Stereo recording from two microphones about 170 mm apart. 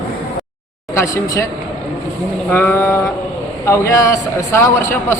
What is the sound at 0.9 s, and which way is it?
Speech, 20° left (ahead or behind).